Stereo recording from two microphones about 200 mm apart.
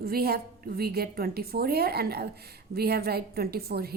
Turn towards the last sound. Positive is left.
turn(degrees=-50)  # may be behind; listen again after turning